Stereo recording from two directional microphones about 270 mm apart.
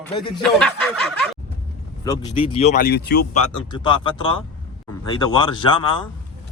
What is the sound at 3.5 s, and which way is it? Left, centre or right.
Speech, centre.